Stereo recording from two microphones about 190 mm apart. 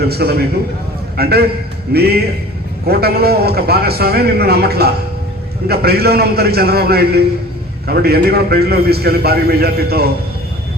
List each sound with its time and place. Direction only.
0.0 s a man's voice: 55° right (ahead or behind)